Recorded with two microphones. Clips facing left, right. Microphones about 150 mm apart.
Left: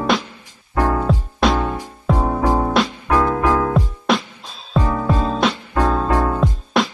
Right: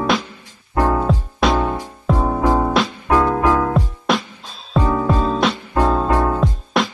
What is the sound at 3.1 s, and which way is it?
Music, 15° right (ahead or behind).